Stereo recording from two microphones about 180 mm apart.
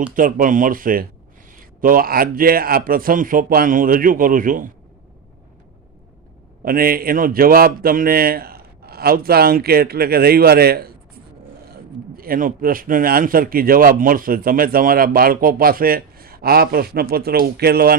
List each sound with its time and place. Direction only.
0.1 s speech: 50° right (ahead or behind)
6.7 s a man's voice: 55° right (ahead or behind)